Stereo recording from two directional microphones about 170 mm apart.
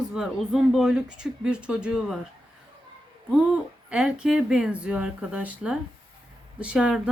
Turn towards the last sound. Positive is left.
turn(degrees=-5)  # may be behind; listen again after turning